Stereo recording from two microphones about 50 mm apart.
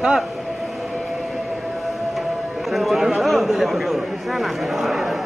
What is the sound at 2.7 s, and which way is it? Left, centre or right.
A man's voice, centre.